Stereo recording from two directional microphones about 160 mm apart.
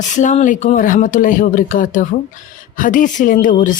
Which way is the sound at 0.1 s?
50° left (ahead or behind).